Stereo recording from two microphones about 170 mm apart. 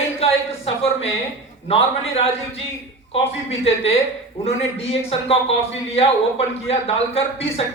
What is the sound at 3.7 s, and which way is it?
A man's voice, 35° left (ahead or behind).